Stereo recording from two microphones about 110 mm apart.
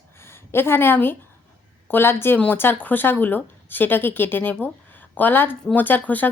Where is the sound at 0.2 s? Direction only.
20° left (ahead or behind).